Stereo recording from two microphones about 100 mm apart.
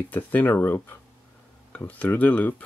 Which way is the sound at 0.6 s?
25° left (ahead or behind).